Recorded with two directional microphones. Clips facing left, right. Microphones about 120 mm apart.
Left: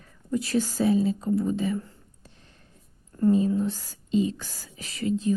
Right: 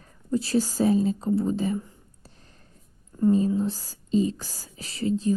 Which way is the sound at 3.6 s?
35° right (ahead or behind).